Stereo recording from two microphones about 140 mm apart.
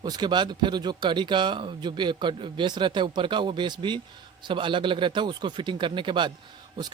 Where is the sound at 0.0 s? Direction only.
30° right (ahead or behind).